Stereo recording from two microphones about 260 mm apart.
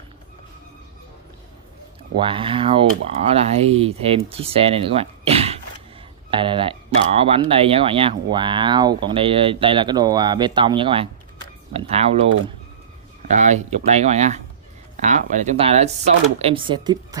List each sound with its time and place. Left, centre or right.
2.1 s speech: centre